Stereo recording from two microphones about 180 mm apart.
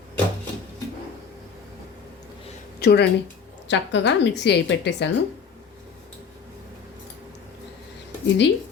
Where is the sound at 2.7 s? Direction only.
65° left (ahead or behind).